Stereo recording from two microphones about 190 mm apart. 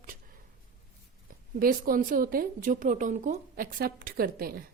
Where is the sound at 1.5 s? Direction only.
50° right (ahead or behind).